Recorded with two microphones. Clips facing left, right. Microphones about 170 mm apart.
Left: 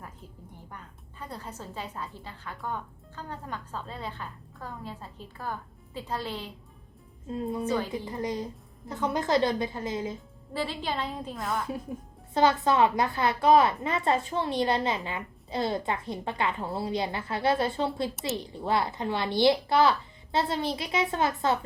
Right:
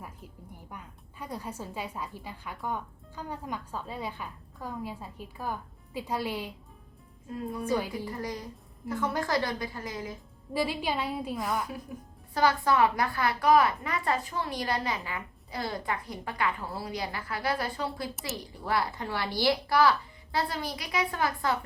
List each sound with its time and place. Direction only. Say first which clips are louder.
0.7 s a woman's voice: right 1 dB; 10° right (ahead or behind)
7.3 s a woman's voice: left 2 dB; 25° left (ahead or behind)
10.5 s a woman's voice: right 2 dB; 10° right (ahead or behind)
12.3 s a woman's voice: left 2 dB; 25° left (ahead or behind)